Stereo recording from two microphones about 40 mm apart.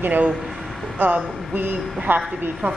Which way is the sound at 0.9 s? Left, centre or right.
Right.